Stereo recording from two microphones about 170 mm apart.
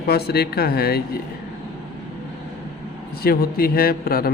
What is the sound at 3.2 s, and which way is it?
A man's voice, 65° left (ahead or behind).